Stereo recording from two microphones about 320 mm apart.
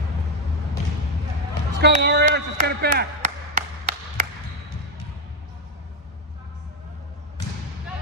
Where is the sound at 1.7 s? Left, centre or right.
Right.